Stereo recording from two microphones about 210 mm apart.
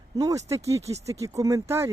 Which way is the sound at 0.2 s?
15° right (ahead or behind).